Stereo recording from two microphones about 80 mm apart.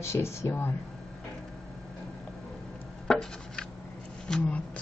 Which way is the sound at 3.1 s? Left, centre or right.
Centre.